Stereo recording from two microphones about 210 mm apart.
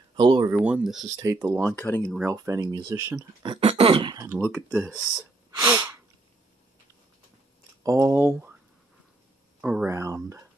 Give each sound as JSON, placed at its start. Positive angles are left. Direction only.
{"t": 0.1, "sound": "speech", "side_deg": -20}
{"t": 0.5, "sound": "speech", "side_deg": -5}
{"t": 1.7, "sound": "speech", "side_deg": 10}
{"t": 2.1, "sound": "speech", "side_deg": -15}
{"t": 5.6, "sound": "sneeze", "side_deg": -15}
{"t": 7.8, "sound": "speech", "side_deg": -15}
{"t": 9.6, "sound": "a sound", "side_deg": -5}
{"t": 9.8, "sound": "speech", "side_deg": -15}